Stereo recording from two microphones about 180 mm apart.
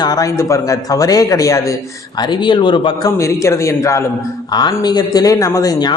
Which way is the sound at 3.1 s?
15° left (ahead or behind).